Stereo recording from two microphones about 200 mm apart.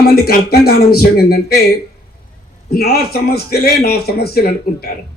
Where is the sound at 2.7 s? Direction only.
50° left (ahead or behind).